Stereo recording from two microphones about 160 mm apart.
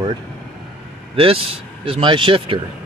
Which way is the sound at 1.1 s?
35° right (ahead or behind).